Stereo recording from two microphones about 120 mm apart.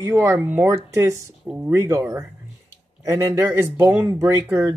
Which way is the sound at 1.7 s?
25° right (ahead or behind).